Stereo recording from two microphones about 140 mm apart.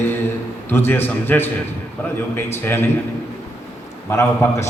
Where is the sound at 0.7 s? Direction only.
15° left (ahead or behind).